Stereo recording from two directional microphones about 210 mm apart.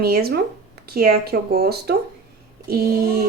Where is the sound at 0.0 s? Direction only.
45° right (ahead or behind).